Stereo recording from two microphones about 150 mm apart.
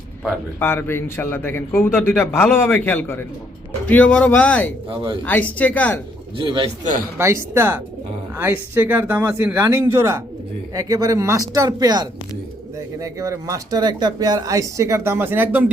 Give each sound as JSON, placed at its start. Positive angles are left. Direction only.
{"t": 0.6, "sound": "a man's voice", "side_deg": 15}
{"t": 6.3, "sound": "a man's voice", "side_deg": -35}
{"t": 7.2, "sound": "speech", "side_deg": -15}